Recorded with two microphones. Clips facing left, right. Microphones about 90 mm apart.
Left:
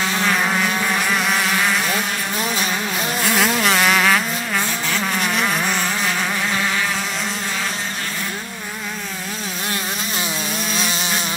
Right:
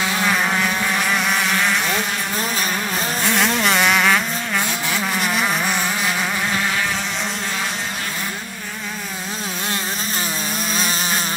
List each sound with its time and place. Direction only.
0.3 s insect: centre (ahead or behind)
1.1 s motorboat: centre (ahead or behind)
3.3 s vehicle: 5° left (ahead or behind)